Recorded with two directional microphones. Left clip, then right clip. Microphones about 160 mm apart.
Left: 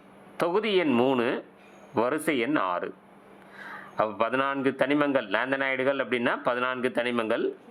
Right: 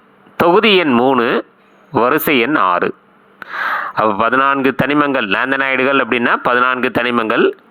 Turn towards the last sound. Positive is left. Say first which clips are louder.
# right 13 dB
turn(degrees=-35)  # may be behind; listen again after turning